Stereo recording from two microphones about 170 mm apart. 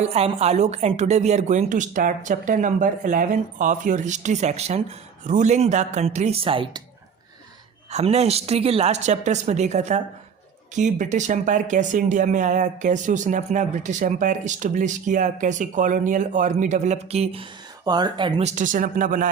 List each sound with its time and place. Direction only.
0.0 s speech: 40° right (ahead or behind)
7.9 s a woman's voice: 40° right (ahead or behind)
17.8 s speech: 25° right (ahead or behind)
18.4 s speech: 50° right (ahead or behind)